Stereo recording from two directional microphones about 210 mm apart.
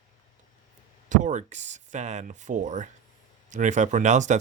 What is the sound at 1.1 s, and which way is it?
Speech, 35° right (ahead or behind).